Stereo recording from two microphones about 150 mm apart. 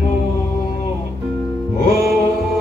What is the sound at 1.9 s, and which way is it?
Music, 90° right.